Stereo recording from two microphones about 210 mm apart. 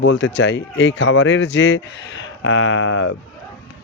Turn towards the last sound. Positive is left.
turn(degrees=70)  # may be behind; listen again after turning